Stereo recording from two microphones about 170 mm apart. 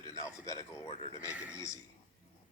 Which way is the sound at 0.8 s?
35° left (ahead or behind).